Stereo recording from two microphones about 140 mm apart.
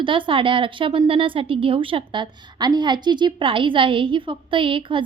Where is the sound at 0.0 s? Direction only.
35° right (ahead or behind).